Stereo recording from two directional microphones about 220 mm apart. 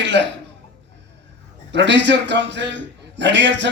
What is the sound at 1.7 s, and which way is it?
A man's voice, 55° right (ahead or behind).